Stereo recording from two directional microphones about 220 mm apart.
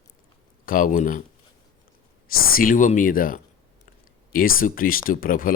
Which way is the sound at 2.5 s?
40° left (ahead or behind).